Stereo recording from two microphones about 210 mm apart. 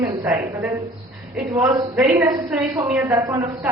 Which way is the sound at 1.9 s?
10° right (ahead or behind).